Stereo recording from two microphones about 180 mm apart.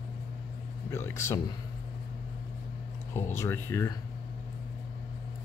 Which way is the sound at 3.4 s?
15° left (ahead or behind).